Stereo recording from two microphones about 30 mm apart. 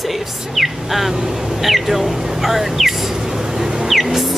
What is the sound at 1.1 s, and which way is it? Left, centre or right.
Speech, centre.